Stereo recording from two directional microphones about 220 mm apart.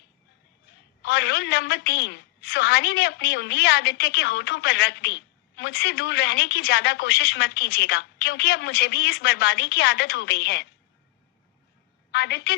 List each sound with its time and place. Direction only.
1.0 s a woman's voice: 50° left (ahead or behind)
12.1 s a woman's voice: 50° left (ahead or behind)